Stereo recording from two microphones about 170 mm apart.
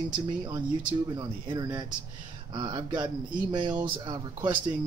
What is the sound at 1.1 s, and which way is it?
Speech, 25° right (ahead or behind).